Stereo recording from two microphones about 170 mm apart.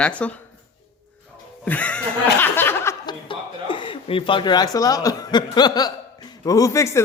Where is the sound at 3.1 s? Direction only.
30° left (ahead or behind).